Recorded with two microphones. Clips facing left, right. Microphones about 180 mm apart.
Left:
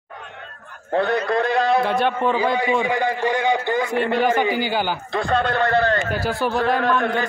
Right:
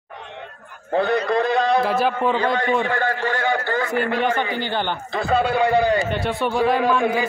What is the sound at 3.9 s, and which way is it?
A man's voice, centre (ahead or behind).